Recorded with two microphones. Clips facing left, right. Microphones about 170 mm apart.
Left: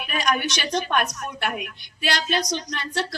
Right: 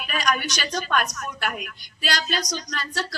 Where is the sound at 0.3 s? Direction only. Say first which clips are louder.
Left 2 dB; 25° left (ahead or behind).